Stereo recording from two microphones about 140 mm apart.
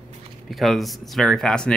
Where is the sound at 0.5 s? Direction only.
Centre (ahead or behind).